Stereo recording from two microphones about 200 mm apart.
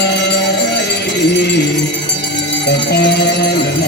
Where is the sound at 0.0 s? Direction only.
60° left (ahead or behind).